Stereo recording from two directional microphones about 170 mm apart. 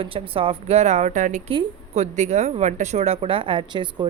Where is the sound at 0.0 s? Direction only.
30° right (ahead or behind); by 1.4 s 50° right (ahead or behind).